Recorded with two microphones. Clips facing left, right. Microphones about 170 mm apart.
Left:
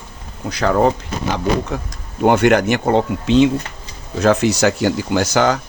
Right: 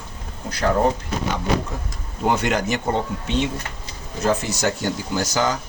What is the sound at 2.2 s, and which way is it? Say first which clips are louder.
Speech: left 8 dB; 65° left (ahead or behind).